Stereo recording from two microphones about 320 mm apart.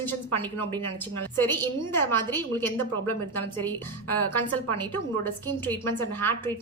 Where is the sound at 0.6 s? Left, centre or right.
Centre.